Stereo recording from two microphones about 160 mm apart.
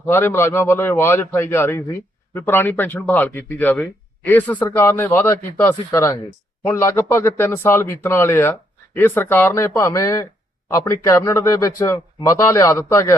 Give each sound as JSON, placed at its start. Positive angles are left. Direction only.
{"t": 0.0, "sound": "a man's voice", "side_deg": 15}